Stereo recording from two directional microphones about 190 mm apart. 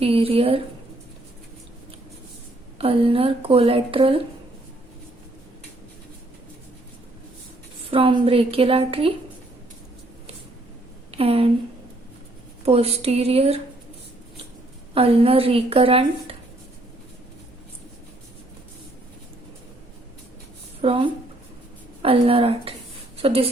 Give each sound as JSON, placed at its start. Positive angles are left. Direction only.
{"t": 0.0, "sound": "a woman's voice", "side_deg": -30}
{"t": 2.7, "sound": "speech", "side_deg": -30}
{"t": 7.9, "sound": "speech", "side_deg": -30}
{"t": 11.1, "sound": "speech", "side_deg": -30}
{"t": 12.6, "sound": "a woman's voice", "side_deg": -30}
{"t": 14.9, "sound": "a woman's voice", "side_deg": -30}
{"t": 20.8, "sound": "a woman's voice", "side_deg": -30}